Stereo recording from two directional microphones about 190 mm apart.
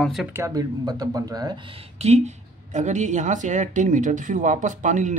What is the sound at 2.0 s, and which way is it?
Speech, 35° right (ahead or behind).